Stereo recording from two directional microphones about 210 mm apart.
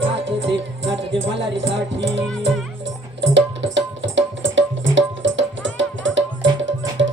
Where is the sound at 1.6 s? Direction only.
60° right (ahead or behind).